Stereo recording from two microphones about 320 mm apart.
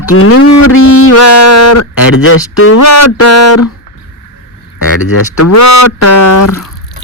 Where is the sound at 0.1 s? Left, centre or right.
Left.